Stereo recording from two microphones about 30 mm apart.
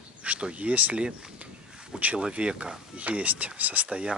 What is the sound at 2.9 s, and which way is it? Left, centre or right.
Speech, right.